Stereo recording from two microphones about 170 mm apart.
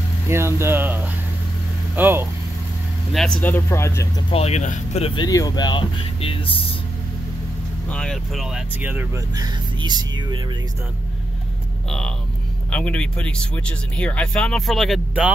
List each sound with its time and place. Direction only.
0.3 s speech: 15° right (ahead or behind)
3.1 s speech: 5° left (ahead or behind)
4.3 s speech: 35° left (ahead or behind)
7.9 s speech: 5° left (ahead or behind); by 10.4 s 25° right (ahead or behind)
12.7 s speech: 5° left (ahead or behind)